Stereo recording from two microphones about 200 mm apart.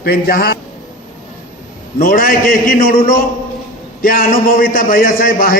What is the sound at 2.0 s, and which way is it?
A man's voice, 45° left (ahead or behind).